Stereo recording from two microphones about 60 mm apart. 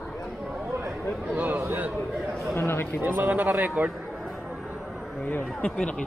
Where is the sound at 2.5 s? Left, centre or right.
Left.